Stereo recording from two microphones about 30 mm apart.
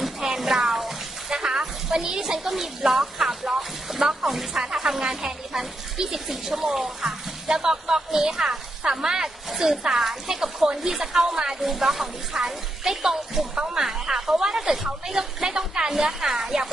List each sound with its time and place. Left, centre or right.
0.4 s a sound: centre
2.4 s a woman's voice: centre
11.6 s a woman's voice: centre